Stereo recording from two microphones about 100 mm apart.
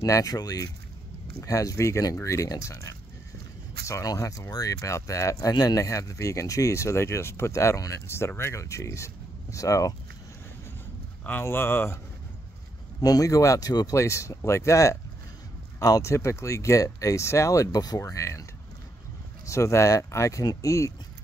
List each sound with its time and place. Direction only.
0.0 s speech: 35° left (ahead or behind)
11.2 s speech: 20° left (ahead or behind)
13.0 s speech: 35° left (ahead or behind)
19.4 s speech: 30° left (ahead or behind)